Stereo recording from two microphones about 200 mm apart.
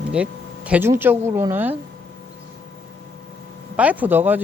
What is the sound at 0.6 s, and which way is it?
Speech, 10° right (ahead or behind).